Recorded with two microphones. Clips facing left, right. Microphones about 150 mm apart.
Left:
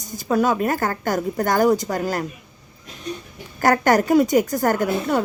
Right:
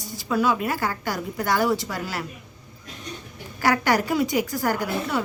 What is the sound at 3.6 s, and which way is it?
Speech, 45° left (ahead or behind).